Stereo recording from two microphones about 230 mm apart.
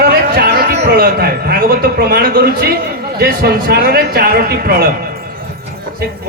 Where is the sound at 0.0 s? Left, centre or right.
Right.